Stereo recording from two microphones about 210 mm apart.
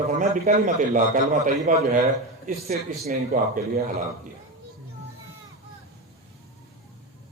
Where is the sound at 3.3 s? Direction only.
40° right (ahead or behind).